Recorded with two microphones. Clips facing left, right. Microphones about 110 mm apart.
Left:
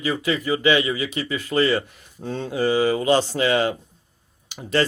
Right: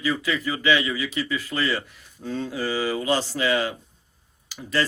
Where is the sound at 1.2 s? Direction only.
35° left (ahead or behind).